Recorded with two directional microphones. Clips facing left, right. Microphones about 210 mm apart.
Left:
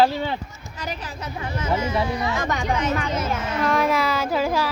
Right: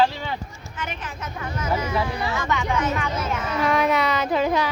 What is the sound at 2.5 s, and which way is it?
Speech, 40° left (ahead or behind).